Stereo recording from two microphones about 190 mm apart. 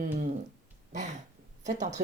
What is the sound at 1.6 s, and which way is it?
Speech, 40° right (ahead or behind).